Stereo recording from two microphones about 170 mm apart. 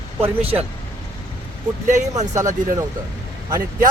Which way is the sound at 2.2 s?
20° right (ahead or behind).